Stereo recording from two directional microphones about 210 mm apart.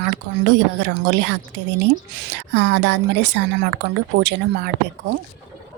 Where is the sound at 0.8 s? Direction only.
55° right (ahead or behind).